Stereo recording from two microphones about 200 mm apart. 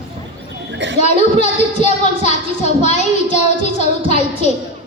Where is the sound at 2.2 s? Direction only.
35° left (ahead or behind).